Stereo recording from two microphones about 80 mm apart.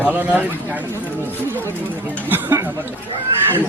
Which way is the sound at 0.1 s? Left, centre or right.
Right.